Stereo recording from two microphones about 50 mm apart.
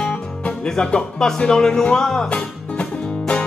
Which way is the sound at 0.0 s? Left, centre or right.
Left.